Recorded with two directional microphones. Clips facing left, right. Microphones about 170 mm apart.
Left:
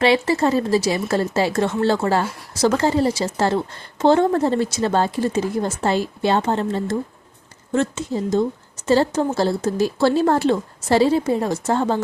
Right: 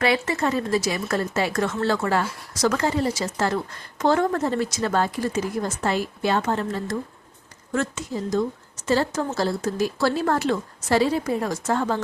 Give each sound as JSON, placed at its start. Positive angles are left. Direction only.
{"t": 0.0, "sound": "a woman's voice", "side_deg": 30}